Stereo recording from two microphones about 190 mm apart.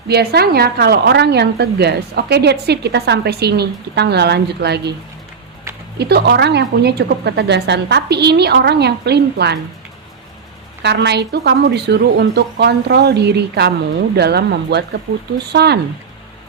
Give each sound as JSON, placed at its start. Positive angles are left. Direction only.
{"t": 0.1, "sound": "a woman's voice", "side_deg": -55}
{"t": 6.0, "sound": "a woman's voice", "side_deg": -60}
{"t": 10.8, "sound": "a woman's voice", "side_deg": -60}